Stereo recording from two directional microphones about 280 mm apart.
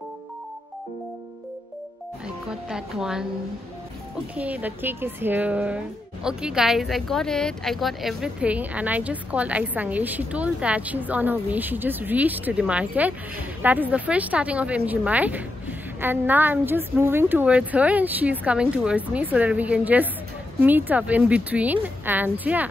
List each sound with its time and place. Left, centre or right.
2.2 s speech: centre
4.4 s speech: centre